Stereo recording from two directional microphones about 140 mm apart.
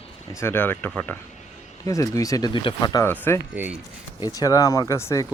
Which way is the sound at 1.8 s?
25° left (ahead or behind).